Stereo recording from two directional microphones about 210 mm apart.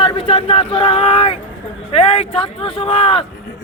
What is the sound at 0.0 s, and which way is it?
A man's voice, 25° left (ahead or behind).